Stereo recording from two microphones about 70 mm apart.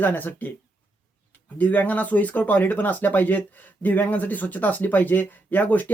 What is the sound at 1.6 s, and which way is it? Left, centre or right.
Speech, left.